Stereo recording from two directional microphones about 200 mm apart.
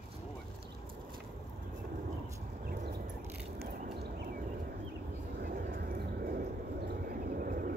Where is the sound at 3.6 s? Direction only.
50° right (ahead or behind).